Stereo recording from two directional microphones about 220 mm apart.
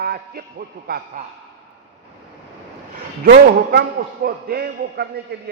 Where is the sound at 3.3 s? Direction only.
45° right (ahead or behind).